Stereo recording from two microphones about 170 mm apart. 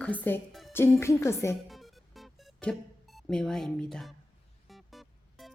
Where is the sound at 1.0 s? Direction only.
15° left (ahead or behind).